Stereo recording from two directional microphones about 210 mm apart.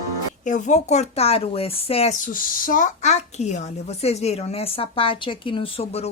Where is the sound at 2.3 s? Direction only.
40° left (ahead or behind).